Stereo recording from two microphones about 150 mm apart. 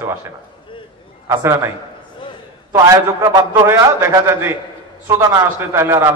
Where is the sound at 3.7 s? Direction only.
20° right (ahead or behind).